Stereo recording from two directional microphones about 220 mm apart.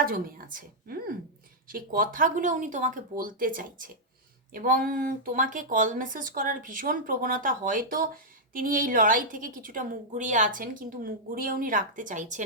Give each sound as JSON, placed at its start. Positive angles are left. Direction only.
{"t": 0.0, "sound": "a woman's voice", "side_deg": -40}